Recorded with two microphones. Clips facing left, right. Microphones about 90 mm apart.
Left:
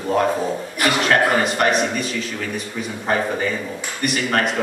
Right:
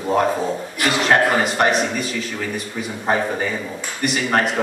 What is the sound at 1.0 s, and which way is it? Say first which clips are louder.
A man's voice: right 2 dB; 25° right (ahead or behind).